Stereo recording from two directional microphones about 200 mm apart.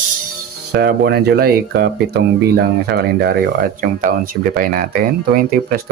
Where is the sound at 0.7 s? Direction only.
55° right (ahead or behind).